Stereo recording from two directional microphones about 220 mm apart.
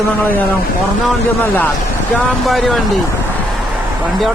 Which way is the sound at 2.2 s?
5° left (ahead or behind).